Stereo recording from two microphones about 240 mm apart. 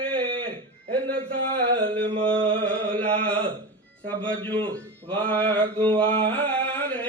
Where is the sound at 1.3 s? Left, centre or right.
Right.